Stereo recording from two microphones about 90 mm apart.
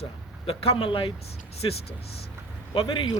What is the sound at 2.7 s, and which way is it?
Speech, 70° left (ahead or behind).